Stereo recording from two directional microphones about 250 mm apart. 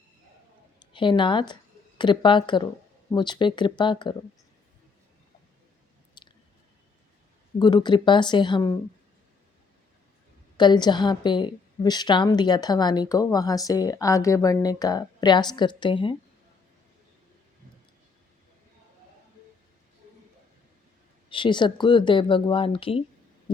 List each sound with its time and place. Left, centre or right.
0.8 s speech: centre
6.2 s chewing: centre
7.6 s a woman's voice: centre
10.6 s a woman's voice: centre
21.2 s speech: centre